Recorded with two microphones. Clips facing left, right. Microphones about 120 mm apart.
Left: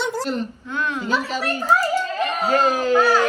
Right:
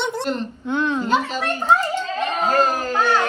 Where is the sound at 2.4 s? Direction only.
40° right (ahead or behind).